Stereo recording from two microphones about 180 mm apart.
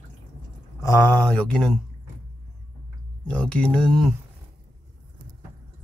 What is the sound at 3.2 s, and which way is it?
Speech, 5° left (ahead or behind).